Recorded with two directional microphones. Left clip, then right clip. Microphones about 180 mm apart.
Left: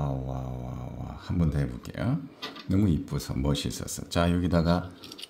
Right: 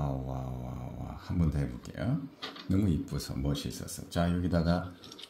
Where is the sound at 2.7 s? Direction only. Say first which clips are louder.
Left 4 dB; 30° left (ahead or behind).